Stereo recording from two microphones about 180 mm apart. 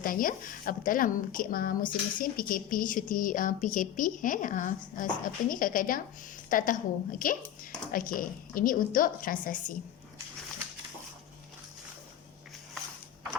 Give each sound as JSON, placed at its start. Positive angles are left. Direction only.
{"t": 0.0, "sound": "a woman's voice", "side_deg": 50}